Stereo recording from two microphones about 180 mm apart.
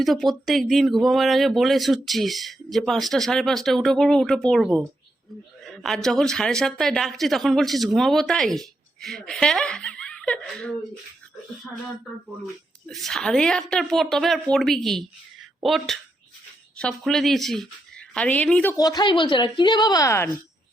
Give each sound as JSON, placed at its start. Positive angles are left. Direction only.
{"t": 0.0, "sound": "speech", "side_deg": 0}
{"t": 12.9, "sound": "a woman's voice", "side_deg": 0}
{"t": 18.9, "sound": "speech", "side_deg": 25}